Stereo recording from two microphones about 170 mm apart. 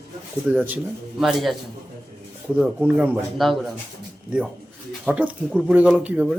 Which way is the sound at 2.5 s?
5° right (ahead or behind).